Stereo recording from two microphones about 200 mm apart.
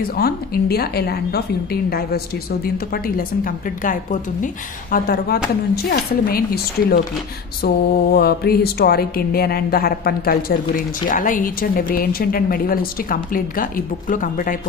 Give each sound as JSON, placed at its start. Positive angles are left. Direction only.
{"t": 0.1, "sound": "mantra", "side_deg": 50}